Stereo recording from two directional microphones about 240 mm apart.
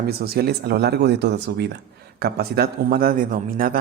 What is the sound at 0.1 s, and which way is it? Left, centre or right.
Speech, right.